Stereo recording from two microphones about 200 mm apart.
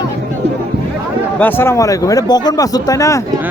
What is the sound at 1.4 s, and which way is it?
Speech, 10° left (ahead or behind).